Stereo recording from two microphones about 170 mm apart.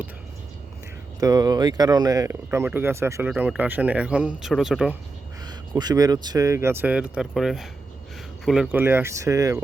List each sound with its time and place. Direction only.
1.2 s speech: 20° right (ahead or behind); by 4.9 s 5° right (ahead or behind)
5.5 s speech: 25° right (ahead or behind)